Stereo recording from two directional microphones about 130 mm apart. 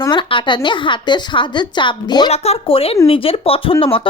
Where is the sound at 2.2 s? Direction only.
55° left (ahead or behind).